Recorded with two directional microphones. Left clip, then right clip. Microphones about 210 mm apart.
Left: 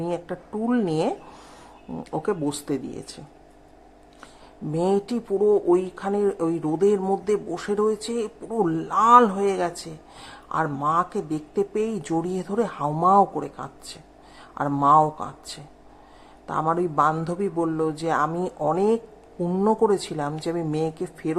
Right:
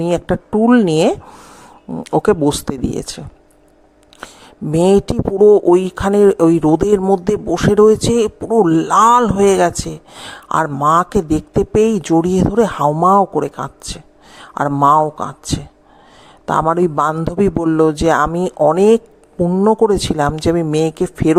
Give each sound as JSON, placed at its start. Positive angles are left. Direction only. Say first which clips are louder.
{"t": 0.0, "sound": "speech", "louder": "right 12 dB", "side_deg": -40}
{"t": 4.7, "sound": "speech", "louder": "right 11 dB", "side_deg": -40}
{"t": 19.4, "sound": "speech", "louder": "right 10 dB", "side_deg": -25}
{"t": 19.6, "sound": "speech", "louder": "right 7 dB", "side_deg": -35}